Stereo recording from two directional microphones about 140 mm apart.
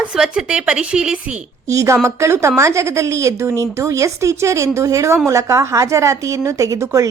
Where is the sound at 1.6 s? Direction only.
20° right (ahead or behind).